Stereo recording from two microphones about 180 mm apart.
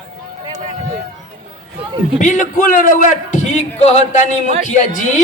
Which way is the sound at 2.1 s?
45° left (ahead or behind).